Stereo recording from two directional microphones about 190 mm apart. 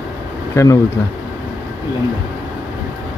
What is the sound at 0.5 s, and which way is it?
Speech, 15° left (ahead or behind).